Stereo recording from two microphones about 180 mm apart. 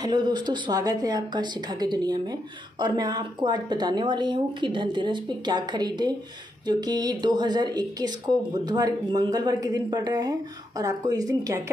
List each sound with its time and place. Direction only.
0.0 s speech: 25° right (ahead or behind)